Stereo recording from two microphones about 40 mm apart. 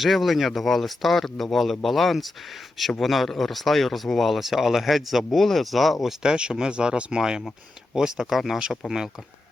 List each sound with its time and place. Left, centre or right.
0.0 s speech: centre
6.2 s speech: right